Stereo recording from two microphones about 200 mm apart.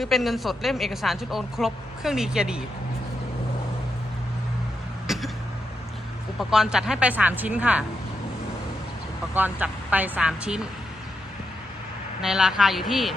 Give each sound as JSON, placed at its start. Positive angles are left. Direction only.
{"t": 0.0, "sound": "a woman's voice", "side_deg": 0}
{"t": 5.0, "sound": "throat clearing", "side_deg": 0}
{"t": 6.5, "sound": "speech", "side_deg": 0}
{"t": 9.3, "sound": "speech", "side_deg": -10}
{"t": 12.2, "sound": "a woman's voice", "side_deg": 0}